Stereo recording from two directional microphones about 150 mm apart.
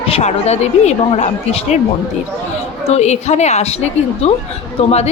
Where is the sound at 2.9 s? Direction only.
50° left (ahead or behind).